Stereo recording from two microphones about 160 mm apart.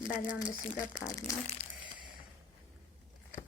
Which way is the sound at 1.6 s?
35° left (ahead or behind).